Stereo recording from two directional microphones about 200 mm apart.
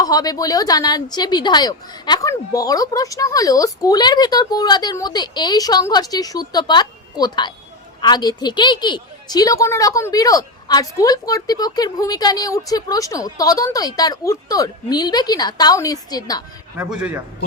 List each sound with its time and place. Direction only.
0.0 s a woman's voice: 20° left (ahead or behind)
16.7 s a man's voice: 5° right (ahead or behind)